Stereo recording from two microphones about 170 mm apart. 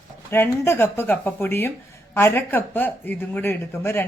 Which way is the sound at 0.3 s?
15° left (ahead or behind).